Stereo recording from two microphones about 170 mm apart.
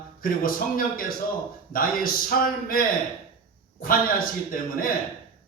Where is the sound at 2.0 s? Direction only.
60° left (ahead or behind).